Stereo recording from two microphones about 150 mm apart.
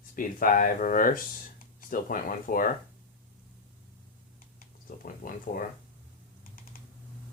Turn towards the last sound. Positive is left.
turn(degrees=70)  # may be behind; listen again after turning